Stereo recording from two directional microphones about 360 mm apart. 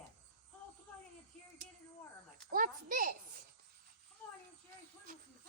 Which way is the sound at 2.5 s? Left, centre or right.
Right.